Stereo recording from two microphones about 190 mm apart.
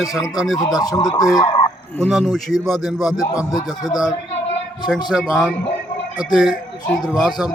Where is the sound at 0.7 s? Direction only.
20° left (ahead or behind).